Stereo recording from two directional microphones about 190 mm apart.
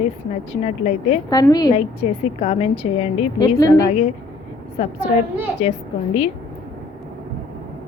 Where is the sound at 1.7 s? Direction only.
35° left (ahead or behind).